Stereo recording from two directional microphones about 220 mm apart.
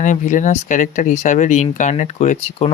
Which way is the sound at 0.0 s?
35° left (ahead or behind).